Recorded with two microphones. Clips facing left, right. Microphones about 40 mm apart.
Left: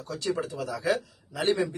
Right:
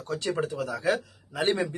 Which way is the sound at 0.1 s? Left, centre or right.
Right.